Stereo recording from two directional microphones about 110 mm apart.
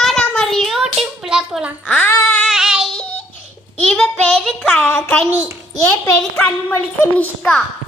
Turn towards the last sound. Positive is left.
turn(degrees=15)  # may be behind; listen again after turning